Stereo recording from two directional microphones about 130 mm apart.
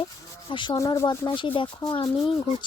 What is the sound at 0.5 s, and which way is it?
Speech, 40° left (ahead or behind).